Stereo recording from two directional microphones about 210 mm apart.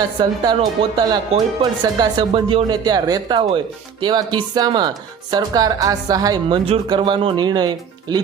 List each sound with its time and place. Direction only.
0.2 s a woman's voice: 20° right (ahead or behind)